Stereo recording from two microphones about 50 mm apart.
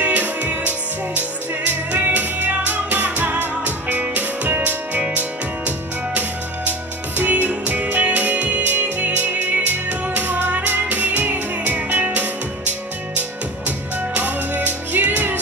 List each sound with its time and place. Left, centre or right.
0.0 s music: right